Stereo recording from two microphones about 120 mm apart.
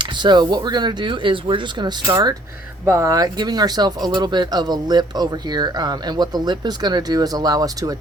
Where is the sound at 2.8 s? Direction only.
25° right (ahead or behind).